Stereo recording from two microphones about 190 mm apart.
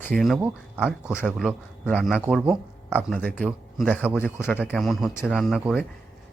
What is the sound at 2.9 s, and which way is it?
Speech, 5° left (ahead or behind).